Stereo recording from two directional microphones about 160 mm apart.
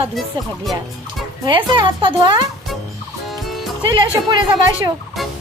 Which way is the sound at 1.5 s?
30° right (ahead or behind).